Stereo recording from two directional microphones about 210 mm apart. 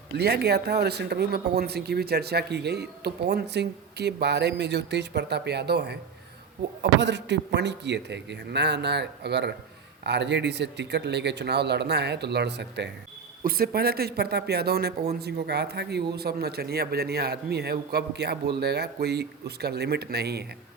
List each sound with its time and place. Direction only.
0.2 s speech: 50° right (ahead or behind)